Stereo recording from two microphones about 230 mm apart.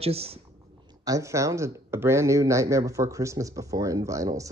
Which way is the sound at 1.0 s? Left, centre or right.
Centre.